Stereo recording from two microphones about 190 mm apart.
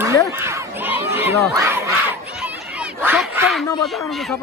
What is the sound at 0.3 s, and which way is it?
Crowd, 15° right (ahead or behind).